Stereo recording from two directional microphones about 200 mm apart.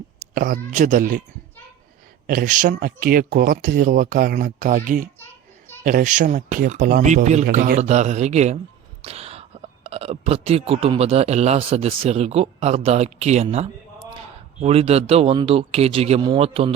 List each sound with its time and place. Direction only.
0.3 s speech: 45° right (ahead or behind)
2.2 s speech: 45° right (ahead or behind); by 16.7 s 25° right (ahead or behind)